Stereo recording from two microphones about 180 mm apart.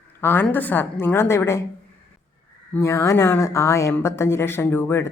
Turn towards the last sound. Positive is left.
turn(degrees=15)  # may be behind; listen again after turning